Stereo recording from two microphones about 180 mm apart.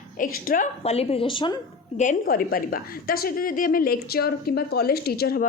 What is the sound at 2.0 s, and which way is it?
A woman's voice, 50° left (ahead or behind).